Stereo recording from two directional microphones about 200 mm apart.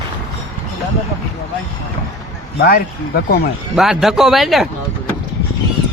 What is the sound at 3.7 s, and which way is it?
Speech, centre (ahead or behind).